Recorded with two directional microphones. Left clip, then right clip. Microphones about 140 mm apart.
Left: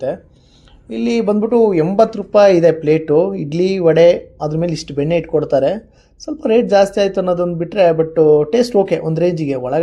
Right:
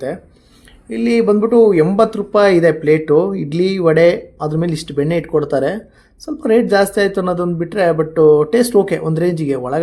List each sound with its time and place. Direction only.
0.9 s speech: 30° left (ahead or behind)